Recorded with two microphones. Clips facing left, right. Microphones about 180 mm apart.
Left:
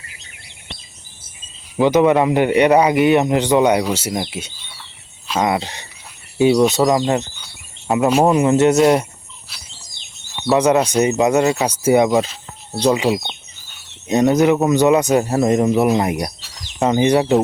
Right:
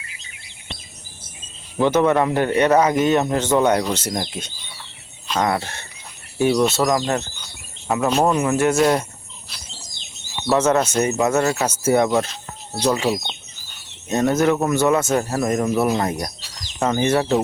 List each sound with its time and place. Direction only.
1.8 s speech: 15° left (ahead or behind)
8.4 s speech: 25° left (ahead or behind)
10.2 s a sound: centre (ahead or behind)
10.6 s speech: 15° left (ahead or behind)
14.1 s speech: 15° left (ahead or behind)